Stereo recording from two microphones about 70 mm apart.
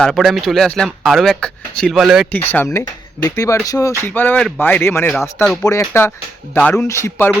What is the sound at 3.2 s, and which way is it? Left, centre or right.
Speech, left.